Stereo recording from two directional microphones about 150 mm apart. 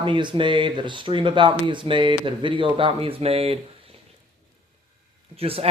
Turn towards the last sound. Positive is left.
turn(degrees=-40)  # may be behind; listen again after turning